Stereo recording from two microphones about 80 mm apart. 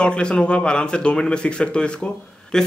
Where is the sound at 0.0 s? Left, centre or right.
Centre.